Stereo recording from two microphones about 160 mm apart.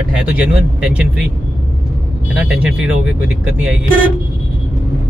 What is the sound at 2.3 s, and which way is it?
Speech, 10° right (ahead or behind).